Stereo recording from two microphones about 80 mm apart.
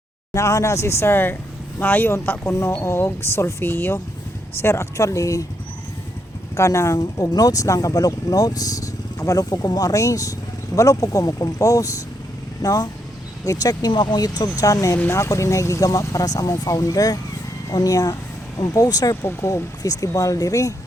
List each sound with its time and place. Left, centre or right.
0.3 s speech: left
6.6 s speech: left
7.0 s speech: left
19.2 s speech: left
19.8 s speech: left